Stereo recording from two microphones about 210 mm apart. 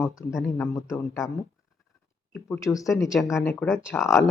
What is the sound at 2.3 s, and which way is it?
Speech, 5° left (ahead or behind).